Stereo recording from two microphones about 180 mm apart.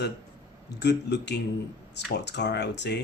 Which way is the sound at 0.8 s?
70° left (ahead or behind).